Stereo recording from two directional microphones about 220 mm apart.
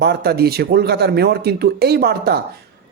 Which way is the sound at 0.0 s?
45° right (ahead or behind).